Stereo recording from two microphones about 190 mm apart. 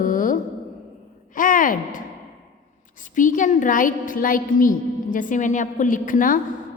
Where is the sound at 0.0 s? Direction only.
45° left (ahead or behind).